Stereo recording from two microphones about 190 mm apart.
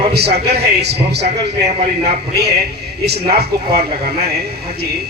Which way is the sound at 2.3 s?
60° right (ahead or behind).